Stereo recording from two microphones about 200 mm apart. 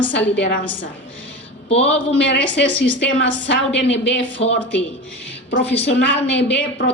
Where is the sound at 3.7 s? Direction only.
65° left (ahead or behind).